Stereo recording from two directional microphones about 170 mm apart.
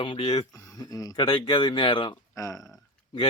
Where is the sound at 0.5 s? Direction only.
20° left (ahead or behind).